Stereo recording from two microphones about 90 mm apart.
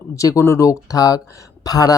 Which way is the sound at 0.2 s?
35° left (ahead or behind).